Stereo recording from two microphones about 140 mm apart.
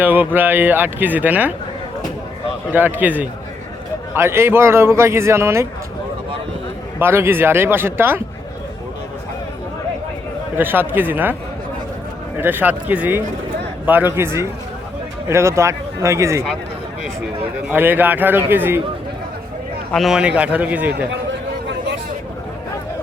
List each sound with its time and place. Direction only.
0.0 s speech: 15° right (ahead or behind)
2.7 s speech: 15° right (ahead or behind)
7.0 s speech: 15° right (ahead or behind)
10.6 s speech: 15° right (ahead or behind)
12.4 s speech: 15° right (ahead or behind)
17.7 s speech: 15° right (ahead or behind)
19.9 s speech: centre (ahead or behind)